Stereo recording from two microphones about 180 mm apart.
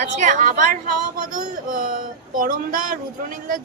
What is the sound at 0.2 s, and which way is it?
Speech, 45° right (ahead or behind).